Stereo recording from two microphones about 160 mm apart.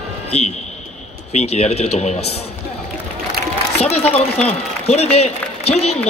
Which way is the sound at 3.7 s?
40° left (ahead or behind).